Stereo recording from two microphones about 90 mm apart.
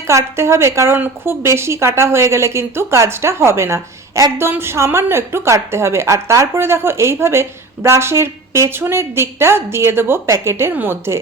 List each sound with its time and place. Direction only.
0.1 s a woman's voice: 30° right (ahead or behind)